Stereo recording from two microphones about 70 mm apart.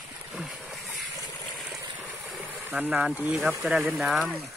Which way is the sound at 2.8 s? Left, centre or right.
Right.